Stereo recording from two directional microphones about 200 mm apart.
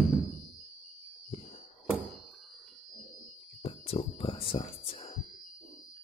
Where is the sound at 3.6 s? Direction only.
30° left (ahead or behind).